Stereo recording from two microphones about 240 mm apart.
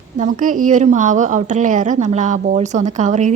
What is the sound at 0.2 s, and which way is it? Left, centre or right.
A woman's voice, right.